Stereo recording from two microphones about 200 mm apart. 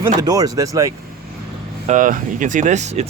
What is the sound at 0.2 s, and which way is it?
Speech, 20° right (ahead or behind).